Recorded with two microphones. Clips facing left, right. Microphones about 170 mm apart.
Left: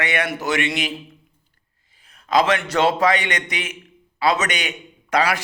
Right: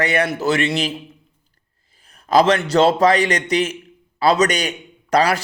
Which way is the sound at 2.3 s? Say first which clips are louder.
Right 4 dB; 35° right (ahead or behind).